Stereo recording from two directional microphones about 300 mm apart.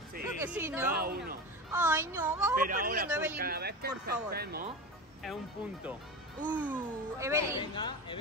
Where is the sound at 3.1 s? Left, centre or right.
Centre.